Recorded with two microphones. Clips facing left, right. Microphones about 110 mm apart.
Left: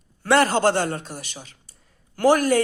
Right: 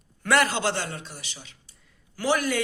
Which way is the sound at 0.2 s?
35° left (ahead or behind).